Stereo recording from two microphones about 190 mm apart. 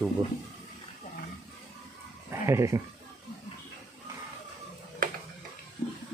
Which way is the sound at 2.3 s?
15° right (ahead or behind).